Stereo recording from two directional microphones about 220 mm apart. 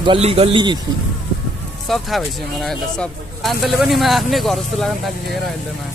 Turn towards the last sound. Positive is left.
turn(degrees=0)  # may be behind; listen again after turning